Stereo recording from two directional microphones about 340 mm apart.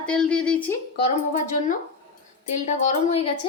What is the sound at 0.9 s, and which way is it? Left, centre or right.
A woman's voice, left.